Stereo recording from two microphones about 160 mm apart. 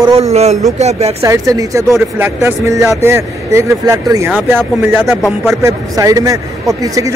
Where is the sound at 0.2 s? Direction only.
45° right (ahead or behind).